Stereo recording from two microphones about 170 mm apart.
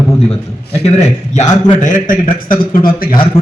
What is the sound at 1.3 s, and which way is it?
A man's voice, 45° left (ahead or behind).